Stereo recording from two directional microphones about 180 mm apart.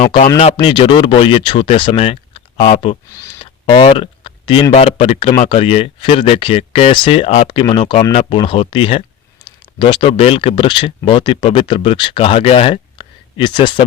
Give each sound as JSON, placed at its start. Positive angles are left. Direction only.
{"t": 0.0, "sound": "speech", "side_deg": 45}
{"t": 0.3, "sound": "speech", "side_deg": 30}
{"t": 3.1, "sound": "a sound", "side_deg": 20}
{"t": 4.7, "sound": "speech", "side_deg": 35}